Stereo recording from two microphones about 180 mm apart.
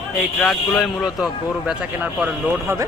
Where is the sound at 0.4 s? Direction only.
Centre (ahead or behind).